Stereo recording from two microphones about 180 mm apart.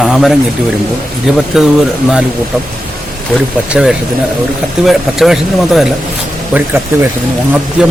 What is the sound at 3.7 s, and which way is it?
Speech, 5° right (ahead or behind).